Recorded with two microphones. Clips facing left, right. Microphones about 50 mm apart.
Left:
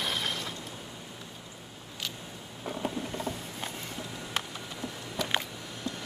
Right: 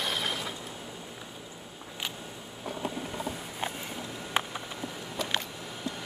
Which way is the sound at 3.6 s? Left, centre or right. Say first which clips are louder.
Right 5 dB; centre.